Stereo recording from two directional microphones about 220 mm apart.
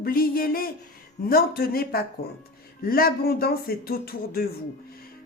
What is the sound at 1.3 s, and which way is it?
Speech, 40° left (ahead or behind).